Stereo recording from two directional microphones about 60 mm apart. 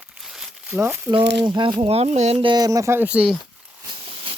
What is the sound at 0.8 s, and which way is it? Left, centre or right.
Speech, right.